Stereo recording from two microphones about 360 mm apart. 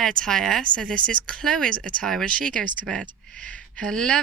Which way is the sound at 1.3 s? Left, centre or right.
Centre.